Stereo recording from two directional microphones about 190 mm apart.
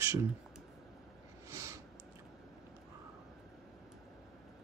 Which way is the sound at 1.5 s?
15° right (ahead or behind).